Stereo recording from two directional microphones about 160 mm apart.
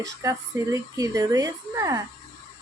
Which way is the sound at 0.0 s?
20° right (ahead or behind).